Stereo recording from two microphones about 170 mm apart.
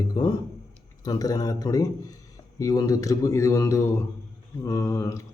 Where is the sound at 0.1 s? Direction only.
25° left (ahead or behind).